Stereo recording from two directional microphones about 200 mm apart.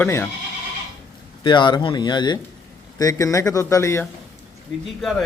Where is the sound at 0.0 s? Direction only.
10° left (ahead or behind).